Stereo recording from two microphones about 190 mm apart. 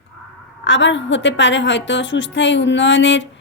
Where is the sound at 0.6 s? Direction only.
75° left (ahead or behind).